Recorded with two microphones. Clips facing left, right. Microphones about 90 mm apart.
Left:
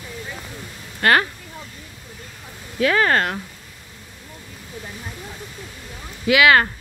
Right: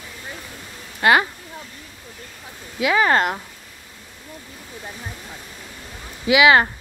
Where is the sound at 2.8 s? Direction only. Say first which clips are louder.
Even; 15° right (ahead or behind).